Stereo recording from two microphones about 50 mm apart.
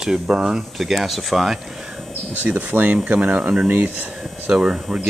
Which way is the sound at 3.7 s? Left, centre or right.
Right.